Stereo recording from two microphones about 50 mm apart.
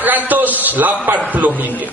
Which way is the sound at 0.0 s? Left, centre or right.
Right.